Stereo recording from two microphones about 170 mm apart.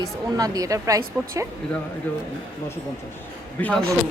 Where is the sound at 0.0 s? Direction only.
20° right (ahead or behind).